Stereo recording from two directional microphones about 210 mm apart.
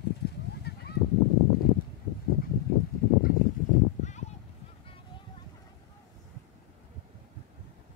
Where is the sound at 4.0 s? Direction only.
35° left (ahead or behind).